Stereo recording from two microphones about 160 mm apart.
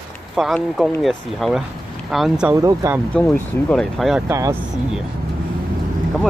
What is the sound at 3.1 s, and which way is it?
Speech, 5° left (ahead or behind).